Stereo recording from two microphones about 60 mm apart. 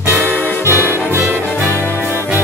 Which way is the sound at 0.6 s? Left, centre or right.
Right.